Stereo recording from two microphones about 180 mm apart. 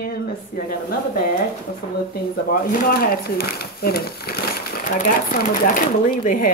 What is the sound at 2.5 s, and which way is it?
Speech, 50° left (ahead or behind).